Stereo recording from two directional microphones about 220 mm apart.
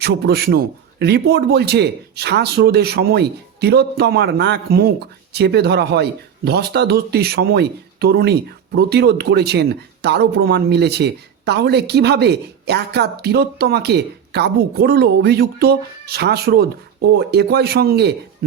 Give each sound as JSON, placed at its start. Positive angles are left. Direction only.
{"t": 0.0, "sound": "a man's voice", "side_deg": -45}